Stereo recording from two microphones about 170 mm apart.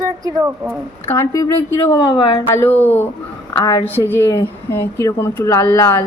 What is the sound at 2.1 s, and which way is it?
Speech, 35° left (ahead or behind).